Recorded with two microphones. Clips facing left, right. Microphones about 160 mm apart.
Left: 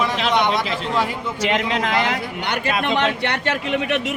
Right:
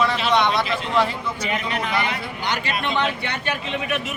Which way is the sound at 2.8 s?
70° left (ahead or behind).